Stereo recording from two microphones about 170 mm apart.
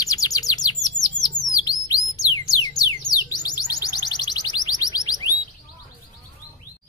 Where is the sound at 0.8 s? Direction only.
20° left (ahead or behind).